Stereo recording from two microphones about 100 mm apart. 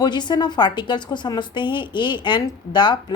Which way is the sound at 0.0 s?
45° left (ahead or behind).